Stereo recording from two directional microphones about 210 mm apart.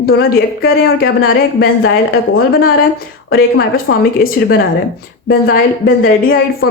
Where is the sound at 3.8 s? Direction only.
65° left (ahead or behind).